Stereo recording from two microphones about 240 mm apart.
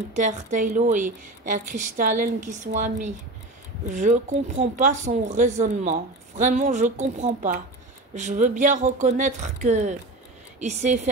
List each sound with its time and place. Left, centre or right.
0.1 s speech: right